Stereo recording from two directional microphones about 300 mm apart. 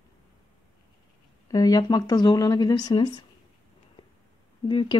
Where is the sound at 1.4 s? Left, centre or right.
Centre.